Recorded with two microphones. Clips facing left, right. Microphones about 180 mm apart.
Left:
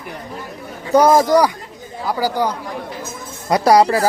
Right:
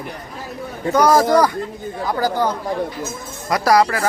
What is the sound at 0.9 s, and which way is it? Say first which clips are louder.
Speech: left 3 dB; 25° left (ahead or behind).